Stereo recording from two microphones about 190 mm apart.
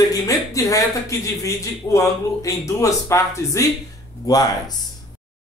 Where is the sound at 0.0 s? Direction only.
20° left (ahead or behind).